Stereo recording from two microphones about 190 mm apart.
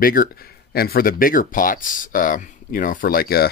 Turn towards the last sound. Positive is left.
turn(degrees=55)  # may be behind; listen again after turning